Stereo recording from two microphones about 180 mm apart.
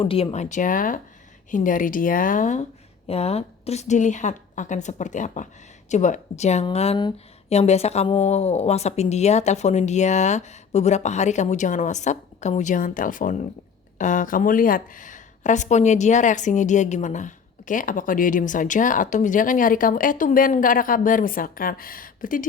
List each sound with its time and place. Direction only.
0.0 s speech: 30° left (ahead or behind); by 22.4 s 50° left (ahead or behind)